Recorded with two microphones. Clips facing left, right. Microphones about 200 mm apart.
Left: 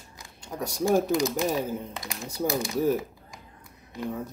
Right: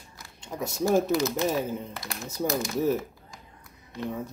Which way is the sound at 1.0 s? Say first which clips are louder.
Even; 15° left (ahead or behind).